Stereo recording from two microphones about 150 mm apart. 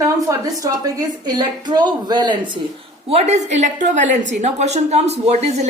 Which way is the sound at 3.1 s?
45° right (ahead or behind).